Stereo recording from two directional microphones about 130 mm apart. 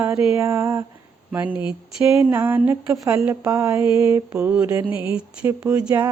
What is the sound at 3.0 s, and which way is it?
Speech, 20° right (ahead or behind).